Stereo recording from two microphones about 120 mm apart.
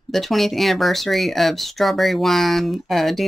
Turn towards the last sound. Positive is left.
turn(degrees=0)  # may be behind; listen again after turning